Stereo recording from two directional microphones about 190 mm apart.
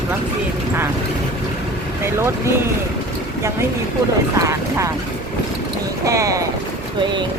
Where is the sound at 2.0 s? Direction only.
15° right (ahead or behind).